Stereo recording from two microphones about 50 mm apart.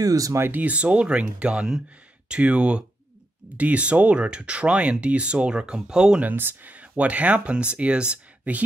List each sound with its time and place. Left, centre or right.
0.4 s speech: right; by 6.2 s centre
6.2 s speech: right